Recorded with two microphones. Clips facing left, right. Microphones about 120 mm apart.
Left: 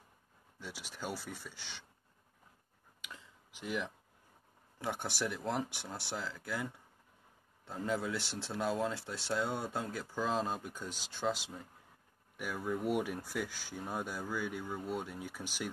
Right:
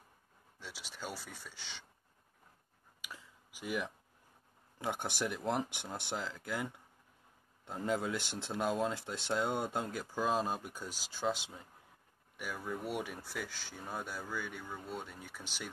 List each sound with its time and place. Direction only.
0.6 s speech: 10° left (ahead or behind)
3.0 s a sound: 10° right (ahead or behind)
4.7 s speech: 15° right (ahead or behind); by 15.7 s 5° left (ahead or behind)